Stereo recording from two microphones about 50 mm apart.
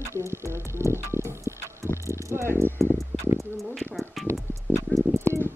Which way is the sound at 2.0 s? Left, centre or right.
Right.